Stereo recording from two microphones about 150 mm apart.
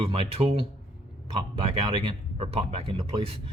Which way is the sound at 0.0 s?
40° right (ahead or behind).